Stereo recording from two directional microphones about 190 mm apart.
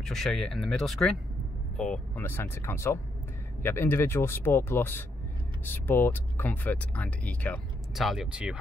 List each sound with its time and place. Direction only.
0.0 s speech: centre (ahead or behind)